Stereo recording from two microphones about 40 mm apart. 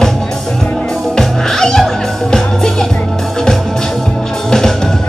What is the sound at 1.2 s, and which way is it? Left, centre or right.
Music, centre.